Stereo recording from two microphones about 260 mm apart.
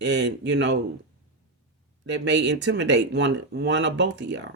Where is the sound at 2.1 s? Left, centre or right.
Right.